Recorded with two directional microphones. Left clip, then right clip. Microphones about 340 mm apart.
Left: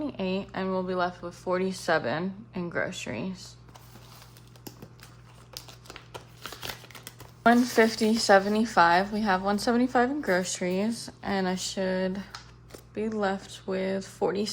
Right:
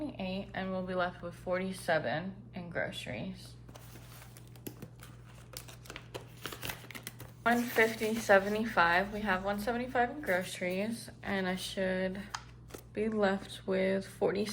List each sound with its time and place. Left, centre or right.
0.2 s speech: centre
5.5 s a sound: centre
7.4 s speech: centre